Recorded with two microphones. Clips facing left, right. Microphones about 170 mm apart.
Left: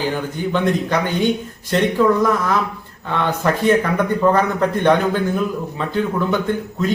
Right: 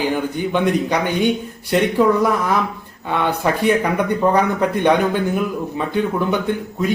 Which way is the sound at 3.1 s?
15° right (ahead or behind).